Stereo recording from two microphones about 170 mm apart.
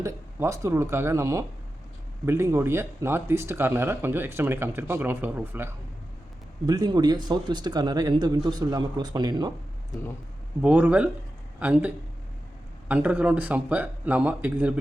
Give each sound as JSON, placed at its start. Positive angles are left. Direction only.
{"t": 0.0, "sound": "speech", "side_deg": -15}
{"t": 6.7, "sound": "speech", "side_deg": -25}
{"t": 10.6, "sound": "speech", "side_deg": -5}
{"t": 12.9, "sound": "speech", "side_deg": -10}